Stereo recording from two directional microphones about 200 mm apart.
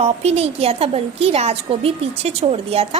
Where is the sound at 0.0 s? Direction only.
30° right (ahead or behind).